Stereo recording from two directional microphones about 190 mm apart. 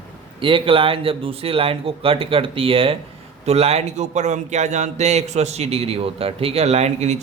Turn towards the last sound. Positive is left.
turn(degrees=-35)  # may be behind; listen again after turning